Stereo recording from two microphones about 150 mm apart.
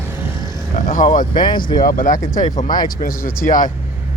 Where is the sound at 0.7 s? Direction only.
60° left (ahead or behind).